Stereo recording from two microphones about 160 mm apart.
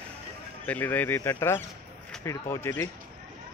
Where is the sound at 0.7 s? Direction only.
10° left (ahead or behind).